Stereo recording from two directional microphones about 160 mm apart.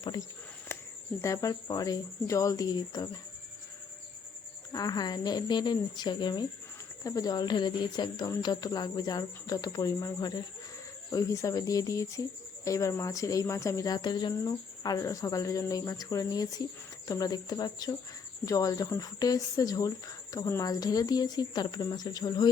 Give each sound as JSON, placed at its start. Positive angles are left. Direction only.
{"t": 0.0, "sound": "speech", "side_deg": 25}
{"t": 4.7, "sound": "speech", "side_deg": 25}